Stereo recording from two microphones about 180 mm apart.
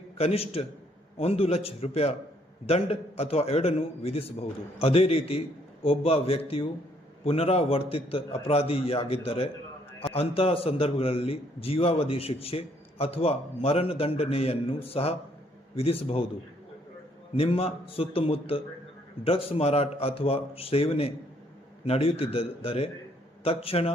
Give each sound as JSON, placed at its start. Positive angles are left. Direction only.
{"t": 0.2, "sound": "a man's voice", "side_deg": 35}
{"t": 17.3, "sound": "a man's voice", "side_deg": 35}